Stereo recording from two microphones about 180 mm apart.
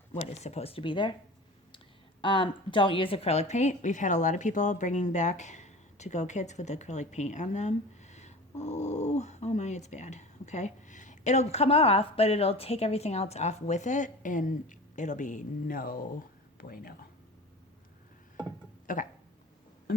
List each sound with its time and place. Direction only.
0.1 s a woman's voice: 40° left (ahead or behind)
2.2 s a woman's voice: 25° left (ahead or behind); by 16.9 s 55° left (ahead or behind)
18.9 s a sound: 45° left (ahead or behind)